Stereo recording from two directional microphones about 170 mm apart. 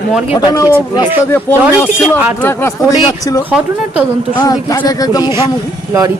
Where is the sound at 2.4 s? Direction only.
15° left (ahead or behind).